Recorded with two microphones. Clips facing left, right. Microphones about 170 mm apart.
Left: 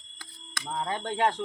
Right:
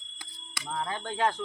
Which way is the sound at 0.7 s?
20° left (ahead or behind).